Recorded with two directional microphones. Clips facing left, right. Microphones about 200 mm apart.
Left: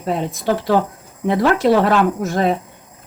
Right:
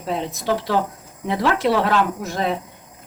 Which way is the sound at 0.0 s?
50° left (ahead or behind).